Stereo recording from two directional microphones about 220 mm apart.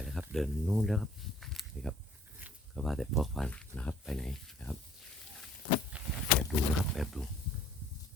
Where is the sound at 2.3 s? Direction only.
5° right (ahead or behind).